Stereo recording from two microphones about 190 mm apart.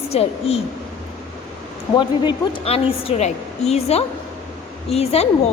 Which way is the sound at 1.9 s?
25° left (ahead or behind).